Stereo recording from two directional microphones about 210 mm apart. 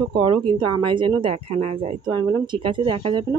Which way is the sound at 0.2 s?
25° right (ahead or behind).